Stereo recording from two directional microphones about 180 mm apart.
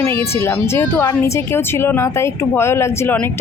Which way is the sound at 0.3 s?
15° left (ahead or behind).